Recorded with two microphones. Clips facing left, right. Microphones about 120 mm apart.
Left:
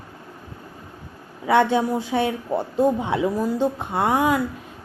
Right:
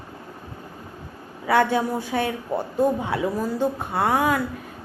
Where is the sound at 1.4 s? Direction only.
20° left (ahead or behind).